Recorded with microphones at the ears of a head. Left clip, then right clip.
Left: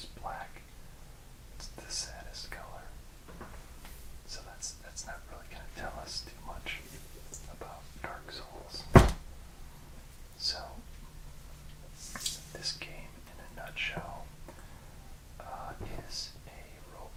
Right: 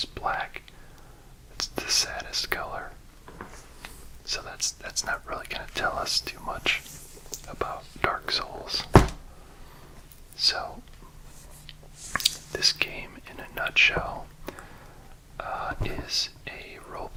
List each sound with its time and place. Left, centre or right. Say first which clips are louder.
0.0 s whispering: right 13 dB; right
10.3 s whispering: right 11 dB; right
12.1 s whispering: right 13 dB; right